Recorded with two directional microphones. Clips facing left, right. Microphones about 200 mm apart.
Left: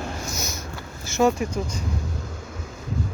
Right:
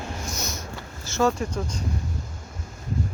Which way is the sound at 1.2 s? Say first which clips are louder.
Left 3 dB; 15° left (ahead or behind).